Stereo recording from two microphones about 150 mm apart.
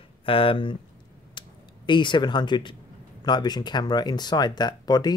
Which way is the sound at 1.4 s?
30° left (ahead or behind).